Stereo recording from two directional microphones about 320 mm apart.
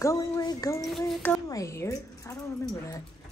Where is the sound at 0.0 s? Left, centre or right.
Centre.